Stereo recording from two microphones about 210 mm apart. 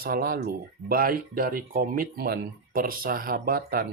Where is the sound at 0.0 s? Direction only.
45° right (ahead or behind).